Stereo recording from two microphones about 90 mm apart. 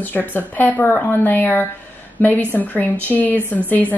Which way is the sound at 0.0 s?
20° left (ahead or behind).